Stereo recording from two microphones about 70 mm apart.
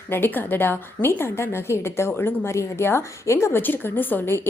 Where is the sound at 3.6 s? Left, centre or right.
Left.